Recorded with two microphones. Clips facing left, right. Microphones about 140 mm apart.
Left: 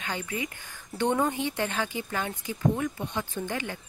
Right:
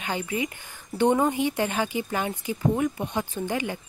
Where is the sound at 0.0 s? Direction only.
15° right (ahead or behind).